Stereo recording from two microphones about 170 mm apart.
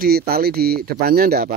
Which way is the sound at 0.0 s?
65° right (ahead or behind).